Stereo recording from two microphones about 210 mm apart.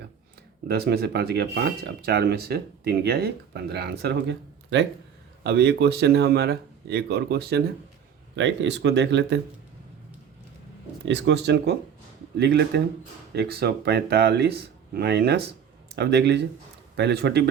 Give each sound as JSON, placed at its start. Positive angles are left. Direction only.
{"t": 0.7, "sound": "speech", "side_deg": -50}
{"t": 11.0, "sound": "speech", "side_deg": -55}